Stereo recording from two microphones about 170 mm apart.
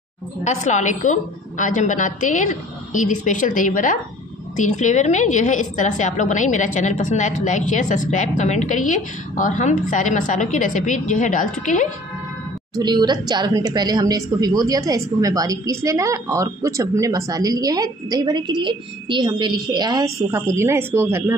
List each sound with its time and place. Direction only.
0.4 s a woman's voice: 45° left (ahead or behind)
12.7 s a woman's voice: 25° right (ahead or behind)